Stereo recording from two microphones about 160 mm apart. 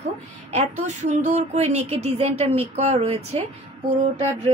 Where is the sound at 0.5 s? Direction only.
45° right (ahead or behind).